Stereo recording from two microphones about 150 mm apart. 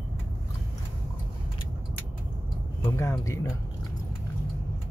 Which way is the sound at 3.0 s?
20° left (ahead or behind).